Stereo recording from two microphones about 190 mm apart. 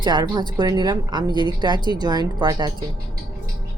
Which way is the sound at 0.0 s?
20° right (ahead or behind).